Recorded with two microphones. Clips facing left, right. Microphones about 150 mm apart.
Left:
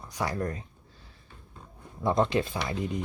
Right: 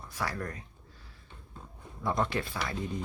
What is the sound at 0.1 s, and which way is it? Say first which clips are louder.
Speech: left 5 dB; 20° left (ahead or behind).